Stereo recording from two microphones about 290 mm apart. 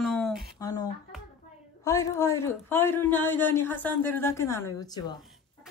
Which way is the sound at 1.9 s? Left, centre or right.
Centre.